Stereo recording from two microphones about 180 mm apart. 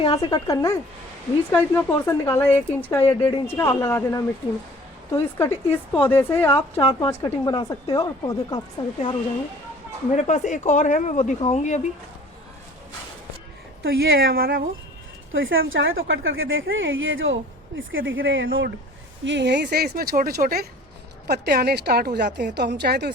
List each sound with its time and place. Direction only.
0.0 s a man's voice: 25° left (ahead or behind)
10.1 s speech: 40° left (ahead or behind)
13.8 s a woman's voice: 60° right (ahead or behind)
15.3 s a woman's voice: 90° right
19.2 s a woman's voice: 80° right